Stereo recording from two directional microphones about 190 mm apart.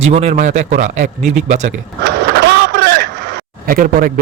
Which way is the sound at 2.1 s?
60° right (ahead or behind).